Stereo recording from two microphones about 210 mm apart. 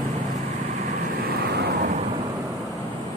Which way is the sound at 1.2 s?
45° right (ahead or behind).